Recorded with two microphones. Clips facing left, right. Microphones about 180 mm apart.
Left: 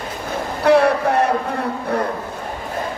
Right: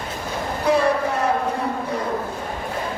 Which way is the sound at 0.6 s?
70° left (ahead or behind).